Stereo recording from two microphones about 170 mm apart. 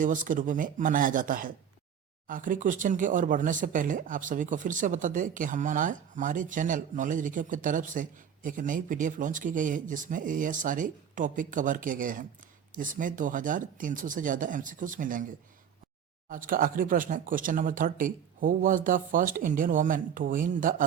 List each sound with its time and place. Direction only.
0.0 s speech: 50° right (ahead or behind)
16.3 s speech: 55° right (ahead or behind)